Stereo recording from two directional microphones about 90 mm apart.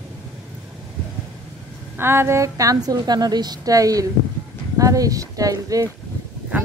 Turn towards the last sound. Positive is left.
turn(degrees=-20)  # may be behind; listen again after turning